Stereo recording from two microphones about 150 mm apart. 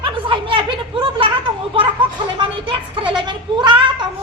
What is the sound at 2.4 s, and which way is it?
Speech, 30° right (ahead or behind).